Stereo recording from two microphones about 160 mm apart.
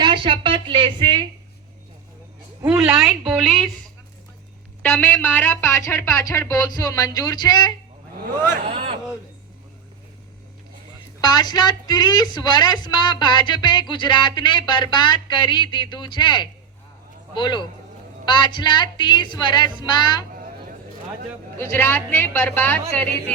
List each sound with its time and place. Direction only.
0.0 s speech: 30° right (ahead or behind)
2.6 s a woman's voice: 10° right (ahead or behind)
4.8 s speech: 10° left (ahead or behind)
8.7 s speech: 35° right (ahead or behind)
11.2 s a woman's voice: 25° left (ahead or behind)
21.6 s speech: 15° left (ahead or behind)